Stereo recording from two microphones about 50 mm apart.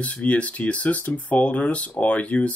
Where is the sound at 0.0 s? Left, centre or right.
Left.